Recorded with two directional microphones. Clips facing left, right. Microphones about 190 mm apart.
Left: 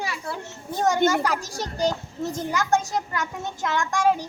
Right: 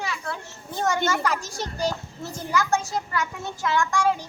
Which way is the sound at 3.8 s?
15° left (ahead or behind).